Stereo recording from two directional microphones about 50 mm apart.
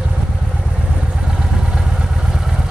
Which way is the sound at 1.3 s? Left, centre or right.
Centre.